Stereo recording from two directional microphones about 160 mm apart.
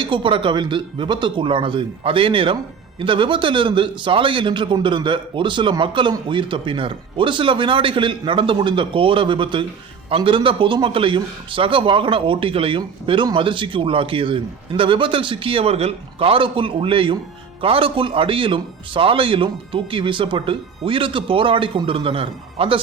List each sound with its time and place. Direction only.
0.0 s speech: 30° right (ahead or behind)